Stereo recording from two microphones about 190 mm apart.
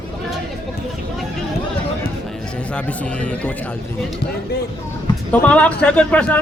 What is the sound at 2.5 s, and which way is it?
A man's voice, 5° left (ahead or behind).